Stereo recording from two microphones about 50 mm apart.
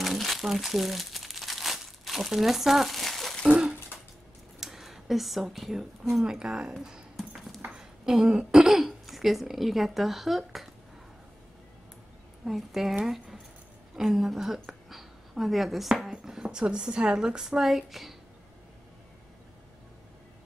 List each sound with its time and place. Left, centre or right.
0.0 s crumpling: centre
3.4 s speech: centre
4.6 s a sound: centre
5.4 s a woman's voice: centre
7.2 s a sound: centre
7.7 s throat clearing: centre
9.0 s speech: centre
12.4 s a woman's voice: centre